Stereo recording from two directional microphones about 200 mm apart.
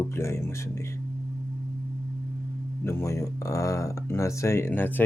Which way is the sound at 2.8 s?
15° left (ahead or behind).